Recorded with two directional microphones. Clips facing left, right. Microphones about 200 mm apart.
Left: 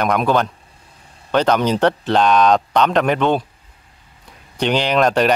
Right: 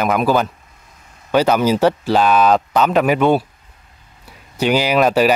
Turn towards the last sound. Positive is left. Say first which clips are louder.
# right 1 dB
turn(degrees=-5)  # may be behind; listen again after turning